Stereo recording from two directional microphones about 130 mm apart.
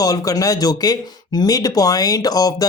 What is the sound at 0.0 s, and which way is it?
Speech, 30° left (ahead or behind).